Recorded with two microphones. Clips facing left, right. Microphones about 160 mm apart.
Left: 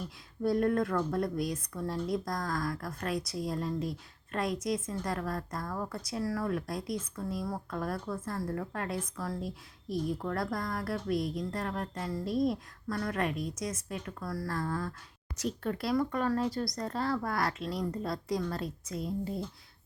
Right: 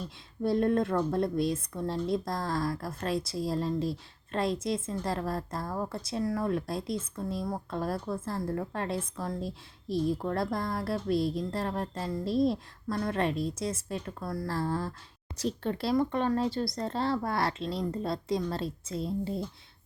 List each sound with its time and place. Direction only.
0.0 s speech: 25° right (ahead or behind)